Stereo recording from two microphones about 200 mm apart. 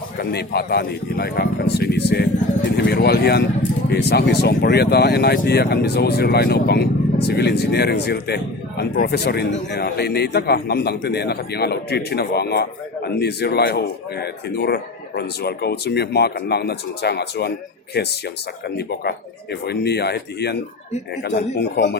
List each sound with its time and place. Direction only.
0.2 s a man's voice: 55° left (ahead or behind)